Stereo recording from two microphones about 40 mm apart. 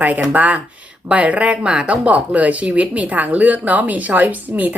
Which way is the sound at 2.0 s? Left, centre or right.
Right.